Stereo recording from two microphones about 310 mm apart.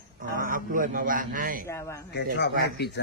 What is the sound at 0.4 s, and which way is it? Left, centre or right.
A man's voice, right.